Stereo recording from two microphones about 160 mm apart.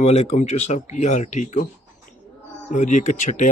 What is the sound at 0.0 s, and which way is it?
Speech, 40° left (ahead or behind).